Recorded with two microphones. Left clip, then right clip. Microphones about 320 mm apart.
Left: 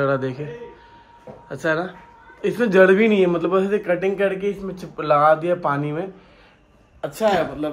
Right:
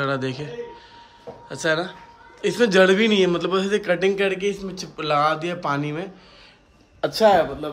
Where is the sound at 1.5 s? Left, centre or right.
Centre.